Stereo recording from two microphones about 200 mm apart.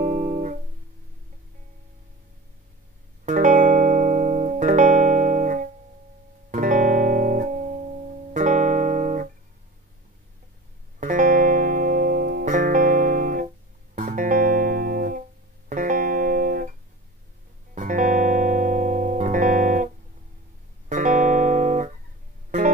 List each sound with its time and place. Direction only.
0.0 s music: 35° right (ahead or behind)
3.3 s music: 40° right (ahead or behind)
11.0 s music: 40° right (ahead or behind)
17.7 s music: 40° right (ahead or behind)
20.9 s music: 40° right (ahead or behind)